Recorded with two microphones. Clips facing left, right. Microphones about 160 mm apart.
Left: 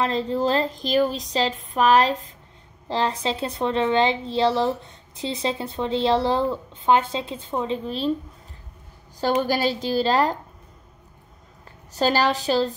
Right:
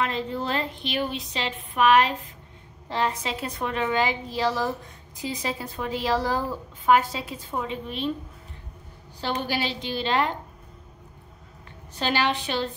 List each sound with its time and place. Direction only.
0.0 s a woman's voice: 30° left (ahead or behind)
9.4 s a woman's voice: 40° left (ahead or behind)
12.0 s a woman's voice: 40° left (ahead or behind)